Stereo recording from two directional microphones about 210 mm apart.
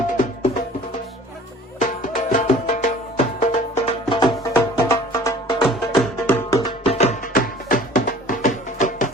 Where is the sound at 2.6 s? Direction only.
30° left (ahead or behind); by 6.6 s 10° left (ahead or behind).